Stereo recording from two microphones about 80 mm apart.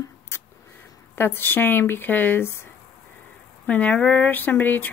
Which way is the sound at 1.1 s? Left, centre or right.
Left.